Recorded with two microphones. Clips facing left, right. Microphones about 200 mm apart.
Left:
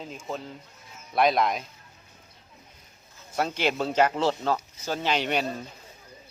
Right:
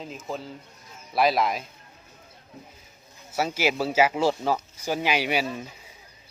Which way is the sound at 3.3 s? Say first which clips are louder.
Right 1 dB; 5° right (ahead or behind).